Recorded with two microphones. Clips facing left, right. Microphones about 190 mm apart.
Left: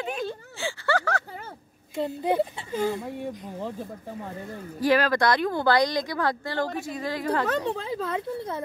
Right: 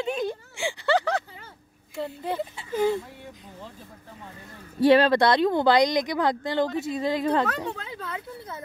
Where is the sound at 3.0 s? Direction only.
55° left (ahead or behind).